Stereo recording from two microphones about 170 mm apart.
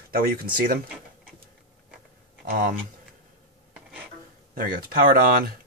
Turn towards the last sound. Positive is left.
turn(degrees=-60)  # may be behind; listen again after turning